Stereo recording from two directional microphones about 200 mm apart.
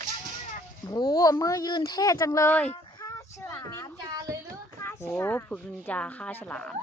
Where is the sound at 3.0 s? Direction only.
15° left (ahead or behind).